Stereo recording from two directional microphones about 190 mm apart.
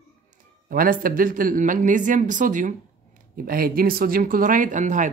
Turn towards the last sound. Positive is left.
turn(degrees=-40)  # may be behind; listen again after turning